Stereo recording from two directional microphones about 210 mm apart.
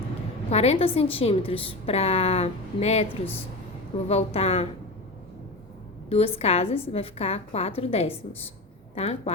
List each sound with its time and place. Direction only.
0.5 s a woman's voice: 30° left (ahead or behind)
4.1 s a woman's voice: 30° left (ahead or behind)
6.1 s a woman's voice: 25° left (ahead or behind)